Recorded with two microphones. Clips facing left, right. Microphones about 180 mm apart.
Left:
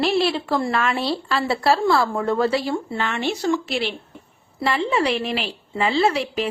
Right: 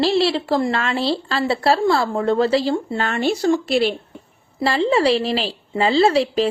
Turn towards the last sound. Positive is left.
turn(degrees=-30)  # may be behind; listen again after turning